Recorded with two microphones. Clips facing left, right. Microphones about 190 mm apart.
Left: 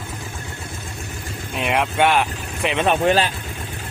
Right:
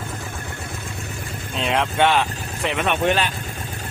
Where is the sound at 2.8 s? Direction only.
35° left (ahead or behind).